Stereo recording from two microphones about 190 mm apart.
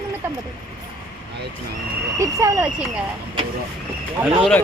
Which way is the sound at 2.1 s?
15° right (ahead or behind).